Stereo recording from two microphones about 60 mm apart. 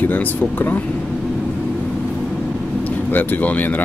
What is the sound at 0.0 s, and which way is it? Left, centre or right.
Speech, left.